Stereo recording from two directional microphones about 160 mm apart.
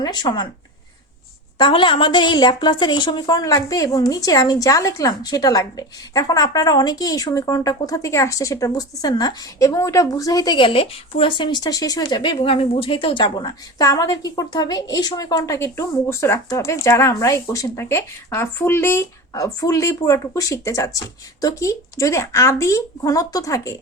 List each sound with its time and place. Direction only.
0.0 s a woman's voice: 25° left (ahead or behind)
1.5 s a woman's voice: 30° left (ahead or behind)